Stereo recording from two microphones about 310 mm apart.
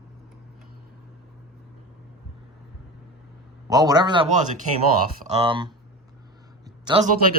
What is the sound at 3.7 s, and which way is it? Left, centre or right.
A man's voice, centre.